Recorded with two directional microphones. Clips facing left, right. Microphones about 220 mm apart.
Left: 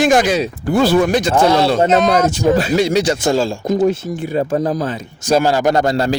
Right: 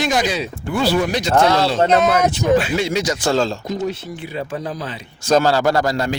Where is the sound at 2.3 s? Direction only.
40° left (ahead or behind).